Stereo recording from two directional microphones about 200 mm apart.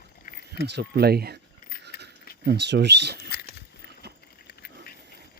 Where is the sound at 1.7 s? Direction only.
45° left (ahead or behind).